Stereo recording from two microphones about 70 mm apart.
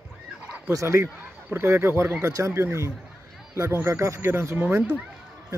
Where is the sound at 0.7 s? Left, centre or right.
Right.